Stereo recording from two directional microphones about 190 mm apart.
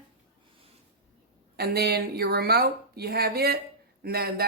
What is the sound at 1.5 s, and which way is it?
A woman's voice, 55° right (ahead or behind).